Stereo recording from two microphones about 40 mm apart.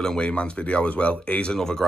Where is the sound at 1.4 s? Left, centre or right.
Centre.